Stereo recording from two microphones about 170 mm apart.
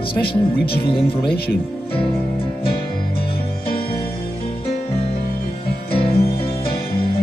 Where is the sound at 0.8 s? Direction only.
30° left (ahead or behind).